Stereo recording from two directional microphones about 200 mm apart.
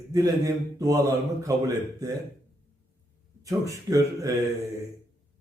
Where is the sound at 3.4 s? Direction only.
15° right (ahead or behind).